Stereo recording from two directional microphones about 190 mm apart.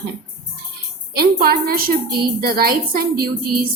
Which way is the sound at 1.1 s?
55° right (ahead or behind).